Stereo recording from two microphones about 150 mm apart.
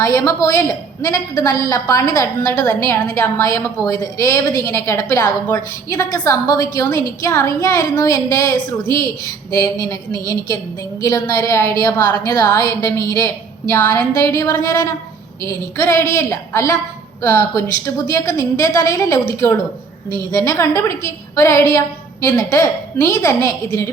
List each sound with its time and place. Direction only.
0.0 s a woman's voice: 20° left (ahead or behind)
20.3 s a woman's voice: 20° left (ahead or behind)